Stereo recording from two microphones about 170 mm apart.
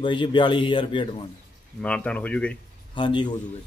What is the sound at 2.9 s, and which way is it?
Speech, 30° left (ahead or behind).